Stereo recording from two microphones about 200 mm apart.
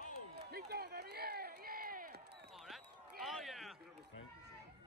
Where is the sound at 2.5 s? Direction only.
Centre (ahead or behind).